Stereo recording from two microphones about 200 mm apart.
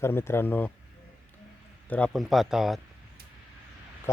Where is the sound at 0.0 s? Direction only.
10° left (ahead or behind).